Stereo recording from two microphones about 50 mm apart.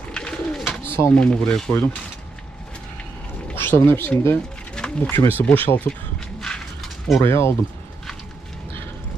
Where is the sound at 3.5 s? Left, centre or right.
Left.